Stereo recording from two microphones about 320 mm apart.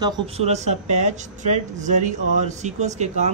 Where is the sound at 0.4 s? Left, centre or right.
Right.